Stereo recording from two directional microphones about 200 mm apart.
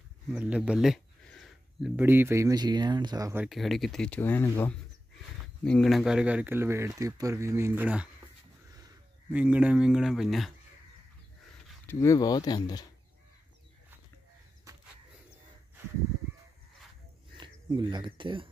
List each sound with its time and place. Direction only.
0.3 s speech: 5° right (ahead or behind)
3.4 s speech: centre (ahead or behind)
9.3 s speech: 5° right (ahead or behind)
11.9 s speech: 15° left (ahead or behind)
17.4 s speech: 25° right (ahead or behind)